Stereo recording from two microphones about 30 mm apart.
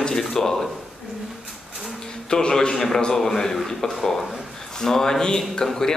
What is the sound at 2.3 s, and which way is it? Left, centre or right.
A man's voice, left.